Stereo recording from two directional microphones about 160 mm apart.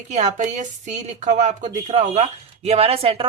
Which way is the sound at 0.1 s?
45° right (ahead or behind).